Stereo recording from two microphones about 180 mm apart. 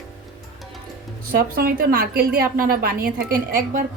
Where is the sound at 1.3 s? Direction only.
55° right (ahead or behind).